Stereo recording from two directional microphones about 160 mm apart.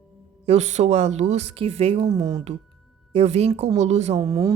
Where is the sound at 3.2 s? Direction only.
40° right (ahead or behind).